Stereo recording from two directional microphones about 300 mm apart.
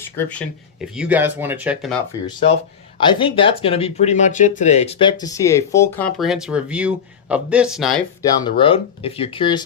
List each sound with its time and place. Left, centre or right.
0.0 s speech: centre
3.0 s speech: centre
8.2 s speech: centre